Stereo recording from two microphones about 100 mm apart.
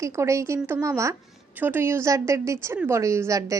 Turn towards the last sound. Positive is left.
turn(degrees=-30)  # may be behind; listen again after turning